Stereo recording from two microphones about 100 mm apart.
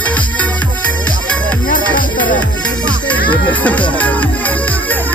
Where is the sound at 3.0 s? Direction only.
15° left (ahead or behind).